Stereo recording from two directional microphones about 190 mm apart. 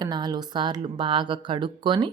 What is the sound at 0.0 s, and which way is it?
A woman's voice, 20° right (ahead or behind).